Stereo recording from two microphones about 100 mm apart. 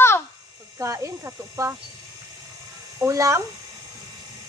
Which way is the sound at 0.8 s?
30° right (ahead or behind).